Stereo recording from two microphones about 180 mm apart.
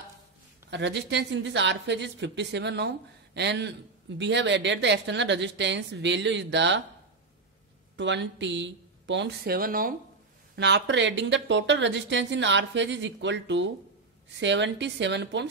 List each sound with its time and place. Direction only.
0.7 s speech: 75° right (ahead or behind)
7.9 s a woman's voice: 80° right; by 9.9 s 50° right (ahead or behind)
10.5 s a woman's voice: 75° right (ahead or behind)